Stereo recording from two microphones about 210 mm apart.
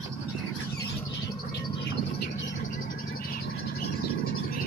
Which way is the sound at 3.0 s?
45° left (ahead or behind).